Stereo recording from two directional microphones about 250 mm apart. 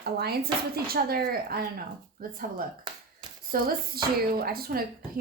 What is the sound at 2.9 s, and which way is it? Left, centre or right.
Finger snapping, centre.